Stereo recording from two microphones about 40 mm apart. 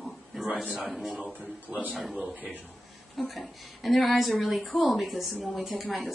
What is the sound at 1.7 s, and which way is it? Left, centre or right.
Speech, right.